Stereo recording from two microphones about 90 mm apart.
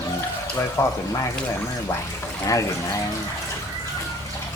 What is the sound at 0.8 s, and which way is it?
Speech, 30° left (ahead or behind).